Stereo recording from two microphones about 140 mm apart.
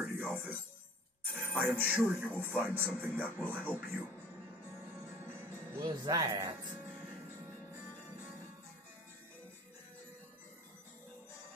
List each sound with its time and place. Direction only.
0.0 s music: 15° right (ahead or behind)
1.3 s speech: 10° right (ahead or behind)
5.8 s speech: 25° right (ahead or behind)